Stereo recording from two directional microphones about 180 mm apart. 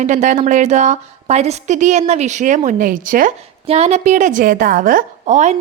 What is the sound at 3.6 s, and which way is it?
A woman's voice, 35° right (ahead or behind).